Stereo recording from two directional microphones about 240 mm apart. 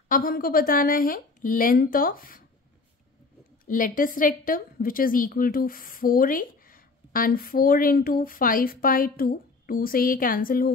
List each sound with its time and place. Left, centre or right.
0.1 s a woman's voice: left
3.6 s a woman's voice: left